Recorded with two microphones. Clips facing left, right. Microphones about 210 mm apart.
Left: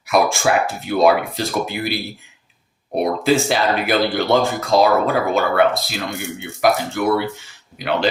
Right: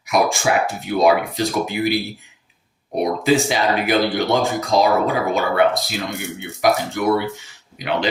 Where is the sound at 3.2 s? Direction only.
15° right (ahead or behind).